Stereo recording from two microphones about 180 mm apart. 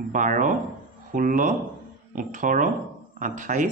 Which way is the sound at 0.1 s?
45° right (ahead or behind).